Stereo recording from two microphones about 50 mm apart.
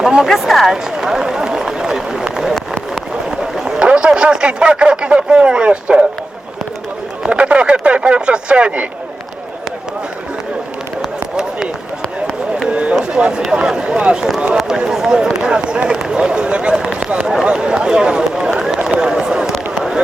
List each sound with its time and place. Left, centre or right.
0.0 s a sound: centre
0.3 s speech: centre
0.9 s a sound: centre
3.4 s run: centre
3.8 s speech: right
7.3 s speech: right
12.6 s run: right
13.5 s speech: centre